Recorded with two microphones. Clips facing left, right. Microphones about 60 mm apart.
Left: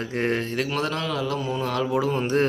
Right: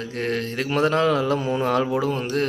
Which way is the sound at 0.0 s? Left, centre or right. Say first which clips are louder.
Left 1 dB; left.